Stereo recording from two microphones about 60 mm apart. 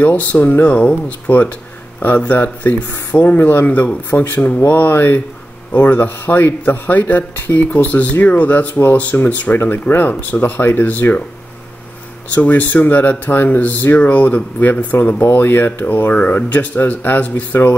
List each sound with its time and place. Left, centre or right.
0.0 s speech: left
12.4 s speech: left